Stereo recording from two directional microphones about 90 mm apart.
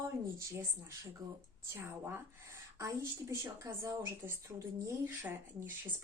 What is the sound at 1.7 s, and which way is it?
A woman's voice, 25° right (ahead or behind).